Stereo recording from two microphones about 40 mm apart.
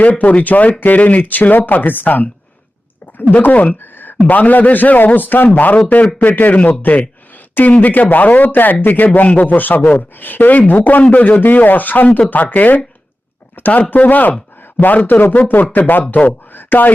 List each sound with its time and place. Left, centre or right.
0.0 s speech: left
3.8 s a sound: left
4.3 s speech: left
8.5 s speech: left
14.6 s a sound: left
15.0 s speech: left